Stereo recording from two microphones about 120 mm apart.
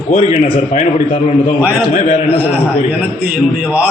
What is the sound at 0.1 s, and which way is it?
A man's voice, 65° left (ahead or behind).